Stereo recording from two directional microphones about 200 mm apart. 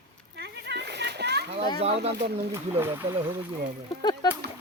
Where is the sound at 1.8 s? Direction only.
30° right (ahead or behind).